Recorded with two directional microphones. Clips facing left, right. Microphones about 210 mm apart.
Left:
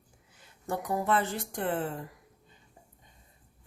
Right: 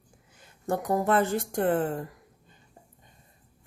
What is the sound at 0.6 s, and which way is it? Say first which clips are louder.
Speech: right 4 dB; 45° right (ahead or behind).